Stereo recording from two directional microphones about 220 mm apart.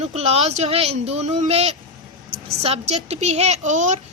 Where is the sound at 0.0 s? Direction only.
30° right (ahead or behind).